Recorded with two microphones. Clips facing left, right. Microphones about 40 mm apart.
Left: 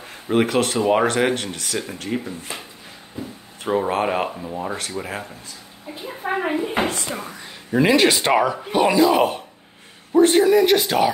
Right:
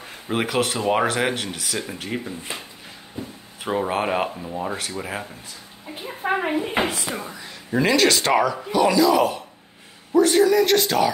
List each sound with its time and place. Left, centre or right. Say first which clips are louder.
0.3 s speech: left 4 dB; centre
6.2 s speech: right 1 dB; right
7.1 s speech: even; centre
7.8 s speech: left 2 dB; centre
8.6 s speech: left 1 dB; left; by 11.1 s centre